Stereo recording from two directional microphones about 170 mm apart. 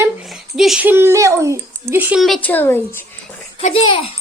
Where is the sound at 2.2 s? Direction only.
Centre (ahead or behind).